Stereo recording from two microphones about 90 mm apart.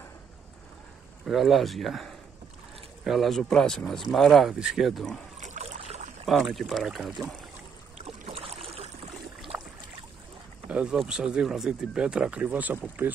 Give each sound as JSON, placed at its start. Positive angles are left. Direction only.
{"t": 1.2, "sound": "speech", "side_deg": 0}
{"t": 6.2, "sound": "speech", "side_deg": 0}
{"t": 8.3, "sound": "boat", "side_deg": -90}
{"t": 10.7, "sound": "speech", "side_deg": -15}